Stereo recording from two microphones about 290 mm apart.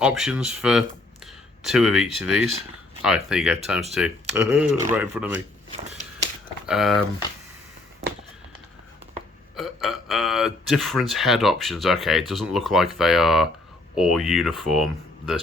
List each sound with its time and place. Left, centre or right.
0.0 s speech: centre
5.6 s a sound: right
6.7 s speech: centre
9.6 s speech: centre